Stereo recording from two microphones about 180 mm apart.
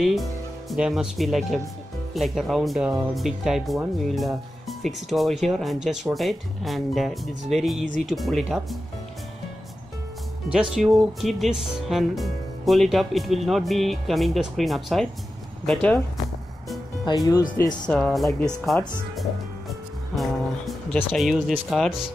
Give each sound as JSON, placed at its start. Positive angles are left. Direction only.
{"t": 0.0, "sound": "speech", "side_deg": 0}
{"t": 10.5, "sound": "speech", "side_deg": -5}
{"t": 17.2, "sound": "speech", "side_deg": 20}
{"t": 17.6, "sound": "speech", "side_deg": 5}
{"t": 20.2, "sound": "a sound", "side_deg": 0}
{"t": 21.0, "sound": "speech", "side_deg": 0}